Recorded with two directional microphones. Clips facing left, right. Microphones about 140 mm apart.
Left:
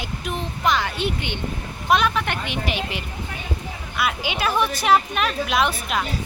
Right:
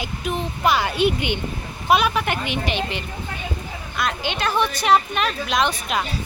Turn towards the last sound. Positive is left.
turn(degrees=0)  # may be behind; listen again after turning